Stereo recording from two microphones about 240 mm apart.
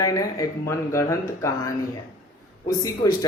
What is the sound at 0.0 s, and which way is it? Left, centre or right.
Speech, centre.